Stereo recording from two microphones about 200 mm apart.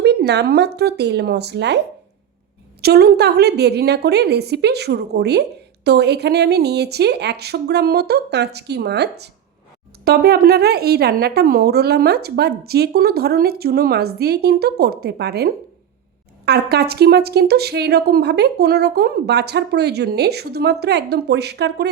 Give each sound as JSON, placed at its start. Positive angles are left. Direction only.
{"t": 0.0, "sound": "a sound", "side_deg": -55}
{"t": 0.8, "sound": "a woman's voice", "side_deg": -55}
{"t": 2.8, "sound": "a woman's voice", "side_deg": -55}